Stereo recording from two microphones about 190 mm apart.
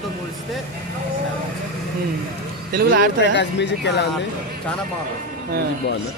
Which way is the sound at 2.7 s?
50° right (ahead or behind).